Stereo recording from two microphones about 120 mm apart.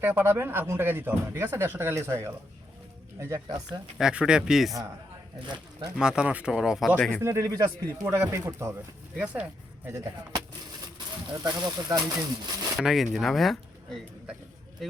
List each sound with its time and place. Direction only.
0.0 s speech: 15° right (ahead or behind)
3.9 s speech: 5° right (ahead or behind)
6.0 s speech: 5° right (ahead or behind)
6.9 s speech: 10° left (ahead or behind)
7.2 s speech: 25° right (ahead or behind)
8.0 s speech: 15° right (ahead or behind)
9.1 s speech: 10° right (ahead or behind)
9.9 s speech: 25° right (ahead or behind)
11.4 s speech: 35° right (ahead or behind)
12.7 s speech: centre (ahead or behind)